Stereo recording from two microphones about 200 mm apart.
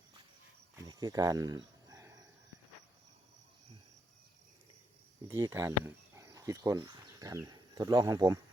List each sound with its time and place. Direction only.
0.8 s cricket: 20° right (ahead or behind)
5.3 s speech: 20° right (ahead or behind)